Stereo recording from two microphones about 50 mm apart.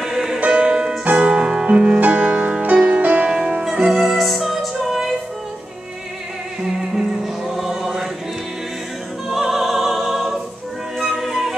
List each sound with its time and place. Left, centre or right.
0.0 s music: centre
0.4 s music: centre
4.0 s music: centre
6.6 s music: centre
9.3 s opera: centre
11.0 s music: centre